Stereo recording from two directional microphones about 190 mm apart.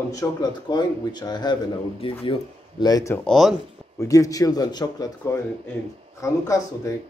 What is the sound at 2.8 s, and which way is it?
Speech, 15° left (ahead or behind).